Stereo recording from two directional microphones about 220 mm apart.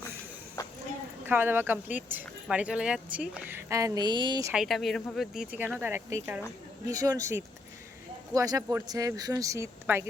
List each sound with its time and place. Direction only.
1.2 s speech: 10° right (ahead or behind)
4.5 s speech: centre (ahead or behind)